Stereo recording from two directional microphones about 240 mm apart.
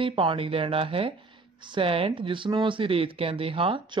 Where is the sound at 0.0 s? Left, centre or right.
Right.